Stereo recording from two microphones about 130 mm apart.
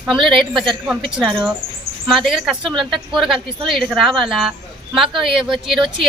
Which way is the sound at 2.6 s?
40° right (ahead or behind).